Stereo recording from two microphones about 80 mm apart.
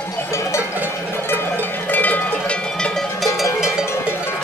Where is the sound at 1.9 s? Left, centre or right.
Left.